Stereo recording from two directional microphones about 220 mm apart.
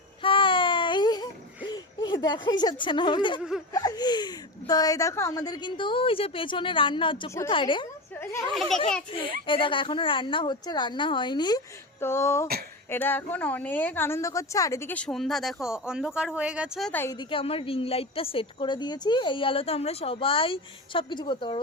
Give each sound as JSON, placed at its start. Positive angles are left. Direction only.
{"t": 0.2, "sound": "baby cry", "side_deg": 25}
{"t": 3.7, "sound": "a woman's voice", "side_deg": 15}
{"t": 8.1, "sound": "children playing", "side_deg": 10}
{"t": 9.1, "sound": "a woman's voice", "side_deg": 25}